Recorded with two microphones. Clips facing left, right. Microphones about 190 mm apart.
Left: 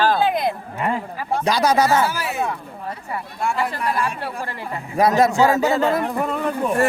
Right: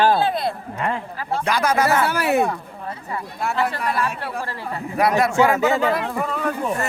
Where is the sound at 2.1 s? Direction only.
65° right (ahead or behind).